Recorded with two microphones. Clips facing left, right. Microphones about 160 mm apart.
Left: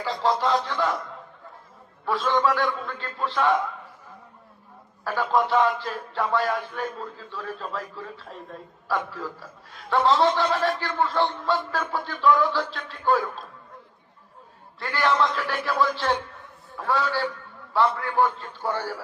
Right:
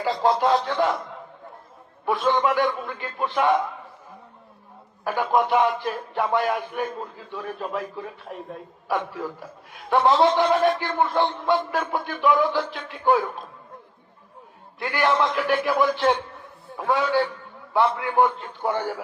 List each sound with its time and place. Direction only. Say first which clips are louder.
2.0 s a man's voice: right 1 dB; 20° right (ahead or behind)
5.0 s a man's voice: right 2 dB; 15° right (ahead or behind)
14.8 s a man's voice: right 1 dB; 15° right (ahead or behind)